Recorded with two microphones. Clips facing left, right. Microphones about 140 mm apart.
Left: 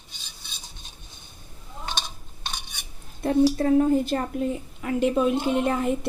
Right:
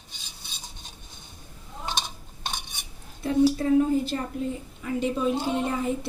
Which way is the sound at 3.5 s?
50° left (ahead or behind).